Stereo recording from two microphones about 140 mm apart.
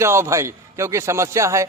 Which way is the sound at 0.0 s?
20° right (ahead or behind).